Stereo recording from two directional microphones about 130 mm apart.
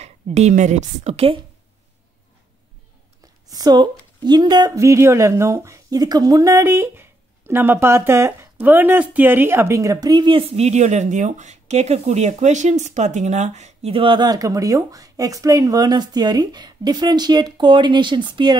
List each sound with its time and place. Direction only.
0.0 s a woman's voice: 60° right (ahead or behind)
3.4 s speech: 30° right (ahead or behind)
10.5 s speech: 55° right (ahead or behind); by 18.6 s 35° right (ahead or behind)